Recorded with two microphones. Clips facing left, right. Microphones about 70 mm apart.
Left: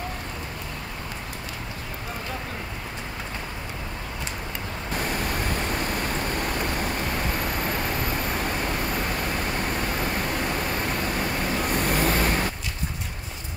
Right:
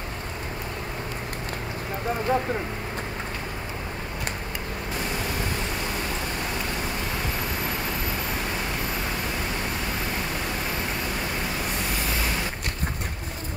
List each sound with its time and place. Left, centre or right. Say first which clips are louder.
5.7 s vehicle: left 2 dB; left
11.7 s vehicle: left 5 dB; left